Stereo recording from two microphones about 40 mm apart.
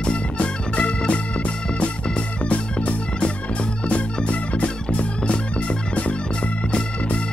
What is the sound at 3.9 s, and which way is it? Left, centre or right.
Organ, left.